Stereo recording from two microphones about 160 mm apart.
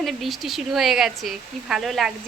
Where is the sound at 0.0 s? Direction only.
Centre (ahead or behind).